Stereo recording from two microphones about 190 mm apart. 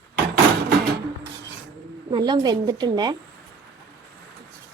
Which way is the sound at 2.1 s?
25° right (ahead or behind).